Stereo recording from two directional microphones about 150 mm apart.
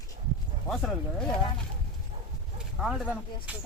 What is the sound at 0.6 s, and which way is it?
Speech, 5° left (ahead or behind).